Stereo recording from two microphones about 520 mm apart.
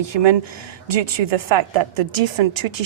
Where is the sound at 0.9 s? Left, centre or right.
Right.